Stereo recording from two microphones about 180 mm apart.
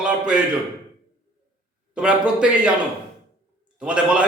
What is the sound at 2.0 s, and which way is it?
Speech, 5° right (ahead or behind).